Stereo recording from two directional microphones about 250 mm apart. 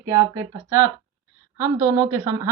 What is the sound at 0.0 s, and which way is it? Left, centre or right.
Speech, centre.